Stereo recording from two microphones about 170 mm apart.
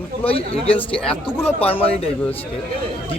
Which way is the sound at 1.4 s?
35° left (ahead or behind).